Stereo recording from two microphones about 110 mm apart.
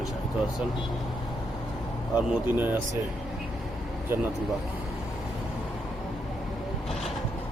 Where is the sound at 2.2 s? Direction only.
15° right (ahead or behind).